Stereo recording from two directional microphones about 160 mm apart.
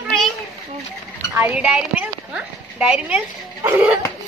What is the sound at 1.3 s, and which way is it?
Speech, 10° right (ahead or behind).